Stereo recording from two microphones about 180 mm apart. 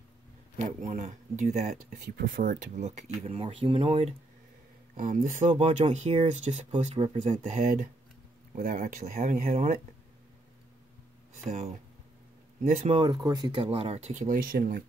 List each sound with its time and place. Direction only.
0.7 s speech: 45° right (ahead or behind)
4.9 s speech: 45° right (ahead or behind)
12.6 s speech: 45° right (ahead or behind)
12.9 s speech: 20° right (ahead or behind); by 14.8 s 50° right (ahead or behind)